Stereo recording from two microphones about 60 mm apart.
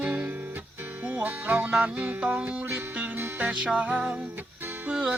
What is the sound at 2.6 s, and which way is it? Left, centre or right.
Music, right.